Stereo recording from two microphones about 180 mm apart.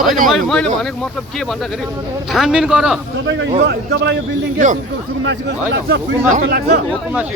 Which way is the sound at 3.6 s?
75° right (ahead or behind).